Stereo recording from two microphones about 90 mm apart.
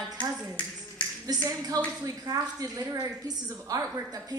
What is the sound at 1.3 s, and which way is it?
A woman's voice, 45° right (ahead or behind).